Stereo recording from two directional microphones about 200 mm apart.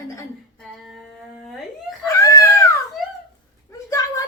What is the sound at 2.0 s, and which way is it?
Screaming, 15° left (ahead or behind).